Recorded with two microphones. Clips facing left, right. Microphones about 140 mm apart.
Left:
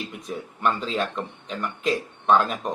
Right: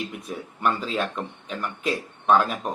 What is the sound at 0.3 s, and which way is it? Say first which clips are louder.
Speech: left 1 dB; 10° right (ahead or behind).